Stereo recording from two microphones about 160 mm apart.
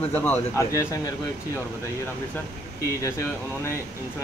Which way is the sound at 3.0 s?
20° left (ahead or behind).